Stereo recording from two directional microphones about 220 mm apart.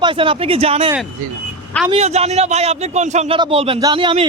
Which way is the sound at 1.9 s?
30° right (ahead or behind).